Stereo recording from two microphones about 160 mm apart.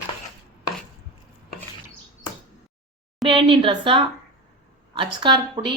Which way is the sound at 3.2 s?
35° right (ahead or behind).